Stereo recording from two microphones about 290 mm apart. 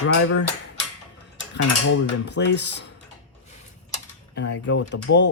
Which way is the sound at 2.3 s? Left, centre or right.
Left.